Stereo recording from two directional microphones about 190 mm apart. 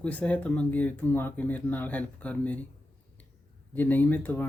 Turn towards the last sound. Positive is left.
turn(degrees=10)  # may be behind; listen again after turning